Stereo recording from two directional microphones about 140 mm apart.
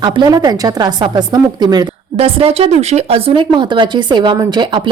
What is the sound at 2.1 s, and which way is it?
A woman's voice, 40° right (ahead or behind).